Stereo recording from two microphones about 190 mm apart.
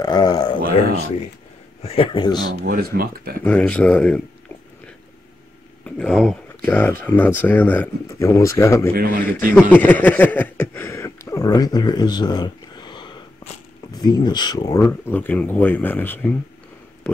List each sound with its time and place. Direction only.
0.0 s a sound: 20° left (ahead or behind)
1.8 s speech: 30° left (ahead or behind)
2.6 s speech: 50° right (ahead or behind)
3.4 s speech: 5° left (ahead or behind)
5.9 s speech: 5° left (ahead or behind)
8.9 s speech: 50° right (ahead or behind)
9.6 s a sound: 10° left (ahead or behind); by 13.5 s 25° left (ahead or behind)
13.9 s speech: 20° left (ahead or behind)